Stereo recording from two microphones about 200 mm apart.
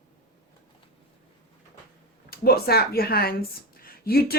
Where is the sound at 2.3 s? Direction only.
50° left (ahead or behind).